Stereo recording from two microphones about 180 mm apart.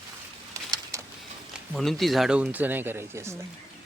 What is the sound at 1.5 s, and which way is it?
Speech, centre (ahead or behind).